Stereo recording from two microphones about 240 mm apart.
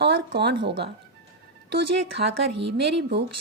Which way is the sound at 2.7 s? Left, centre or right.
Right.